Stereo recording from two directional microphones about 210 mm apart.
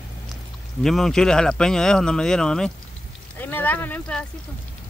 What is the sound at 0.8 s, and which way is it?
Speech, centre (ahead or behind).